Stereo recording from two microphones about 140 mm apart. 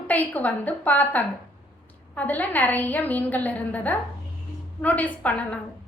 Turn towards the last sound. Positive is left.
turn(degrees=10)  # may be behind; listen again after turning